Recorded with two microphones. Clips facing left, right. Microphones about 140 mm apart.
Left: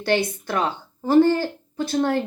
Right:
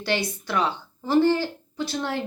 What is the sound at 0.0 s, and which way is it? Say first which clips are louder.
Speech: left 5 dB; 50° left (ahead or behind).